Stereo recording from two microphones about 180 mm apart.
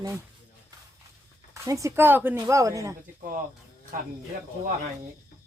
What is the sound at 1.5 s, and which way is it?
Speech, 15° right (ahead or behind).